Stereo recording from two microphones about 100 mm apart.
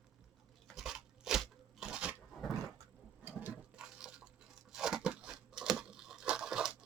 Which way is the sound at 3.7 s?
5° right (ahead or behind).